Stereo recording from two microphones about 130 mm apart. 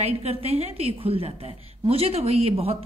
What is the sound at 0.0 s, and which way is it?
A woman's voice, 50° right (ahead or behind).